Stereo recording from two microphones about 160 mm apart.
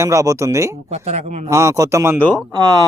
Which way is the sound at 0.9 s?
40° right (ahead or behind).